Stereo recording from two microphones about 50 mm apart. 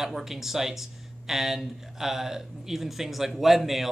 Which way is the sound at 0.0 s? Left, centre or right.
Centre.